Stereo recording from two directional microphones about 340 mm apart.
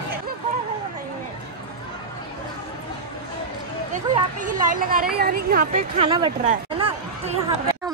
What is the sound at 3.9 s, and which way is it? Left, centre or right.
A woman's voice, right.